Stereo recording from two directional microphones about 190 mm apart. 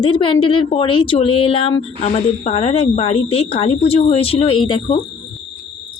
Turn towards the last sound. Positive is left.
turn(degrees=25)  # may be behind; listen again after turning